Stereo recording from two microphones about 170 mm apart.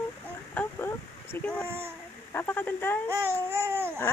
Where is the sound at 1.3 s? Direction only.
10° left (ahead or behind).